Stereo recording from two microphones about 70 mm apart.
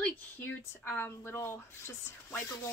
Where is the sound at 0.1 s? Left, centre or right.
Left.